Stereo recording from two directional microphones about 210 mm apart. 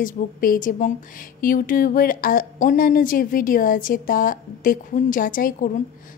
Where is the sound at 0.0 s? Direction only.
40° left (ahead or behind).